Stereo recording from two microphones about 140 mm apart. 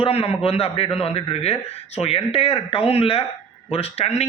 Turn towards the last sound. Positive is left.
turn(degrees=50)  # may be behind; listen again after turning